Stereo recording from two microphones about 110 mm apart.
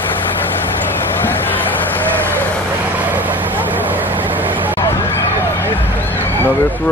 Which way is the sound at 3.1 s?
15° right (ahead or behind).